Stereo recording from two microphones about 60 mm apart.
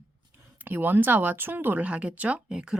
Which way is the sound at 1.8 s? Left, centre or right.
Right.